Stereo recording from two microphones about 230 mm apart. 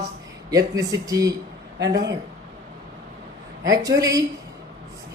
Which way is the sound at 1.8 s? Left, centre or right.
Right.